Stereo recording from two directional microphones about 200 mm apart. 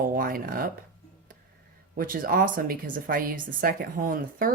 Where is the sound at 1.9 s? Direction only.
45° right (ahead or behind).